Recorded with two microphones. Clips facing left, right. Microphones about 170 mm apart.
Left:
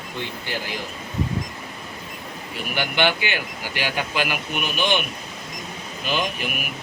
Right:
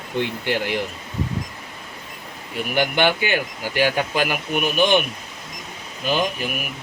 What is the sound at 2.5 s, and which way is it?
Speech, 50° right (ahead or behind).